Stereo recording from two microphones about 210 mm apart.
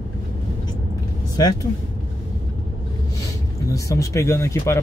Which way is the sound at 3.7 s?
15° left (ahead or behind).